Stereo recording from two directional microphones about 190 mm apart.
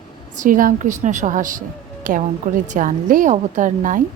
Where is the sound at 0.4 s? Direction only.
45° right (ahead or behind).